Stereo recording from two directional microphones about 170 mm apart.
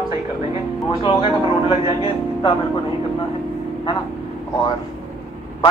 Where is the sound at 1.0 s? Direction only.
30° left (ahead or behind).